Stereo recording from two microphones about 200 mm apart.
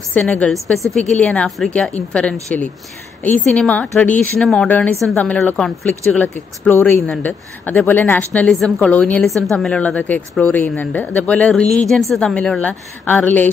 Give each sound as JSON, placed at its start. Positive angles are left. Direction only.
{"t": 0.1, "sound": "a woman's voice", "side_deg": 5}
{"t": 11.6, "sound": "a woman's voice", "side_deg": 35}
{"t": 12.0, "sound": "a woman's voice", "side_deg": 0}